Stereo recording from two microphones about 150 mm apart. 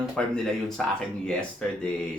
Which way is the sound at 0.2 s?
5° left (ahead or behind).